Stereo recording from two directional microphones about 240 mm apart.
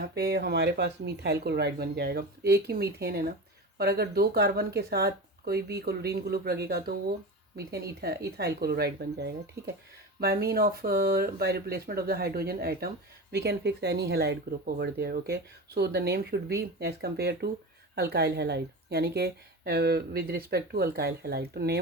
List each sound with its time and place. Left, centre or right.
0.1 s speech: right